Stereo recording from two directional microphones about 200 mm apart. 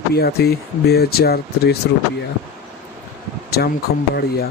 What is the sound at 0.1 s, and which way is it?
Speech, 50° left (ahead or behind).